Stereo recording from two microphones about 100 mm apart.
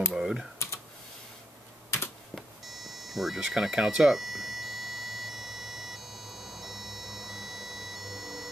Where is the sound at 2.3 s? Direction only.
Centre (ahead or behind).